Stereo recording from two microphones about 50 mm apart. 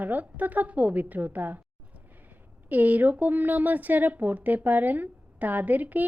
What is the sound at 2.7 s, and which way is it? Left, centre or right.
Speech, right.